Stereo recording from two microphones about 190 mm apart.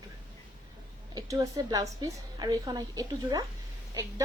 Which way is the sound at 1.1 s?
20° right (ahead or behind).